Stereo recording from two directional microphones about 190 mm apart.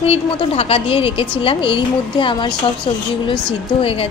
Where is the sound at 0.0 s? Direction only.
30° left (ahead or behind).